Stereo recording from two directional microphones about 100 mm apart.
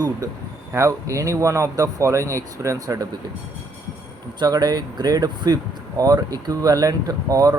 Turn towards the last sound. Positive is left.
turn(degrees=-40)  # may be behind; listen again after turning